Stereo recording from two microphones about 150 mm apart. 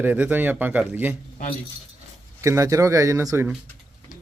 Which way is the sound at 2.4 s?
20° right (ahead or behind).